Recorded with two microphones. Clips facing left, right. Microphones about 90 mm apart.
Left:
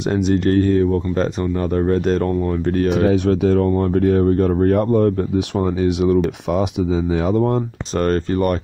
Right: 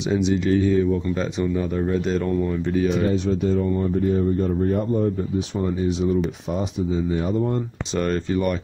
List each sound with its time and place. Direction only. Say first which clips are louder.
0.1 s speech: left 3 dB; 55° left (ahead or behind); by 7.6 s 85° left
8.0 s speech: left 4 dB; 50° left (ahead or behind)